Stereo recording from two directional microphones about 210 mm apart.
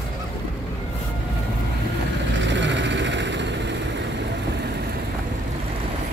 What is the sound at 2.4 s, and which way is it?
Vehicle, 60° right (ahead or behind).